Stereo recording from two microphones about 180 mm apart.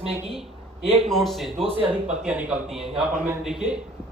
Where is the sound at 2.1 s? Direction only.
5° right (ahead or behind).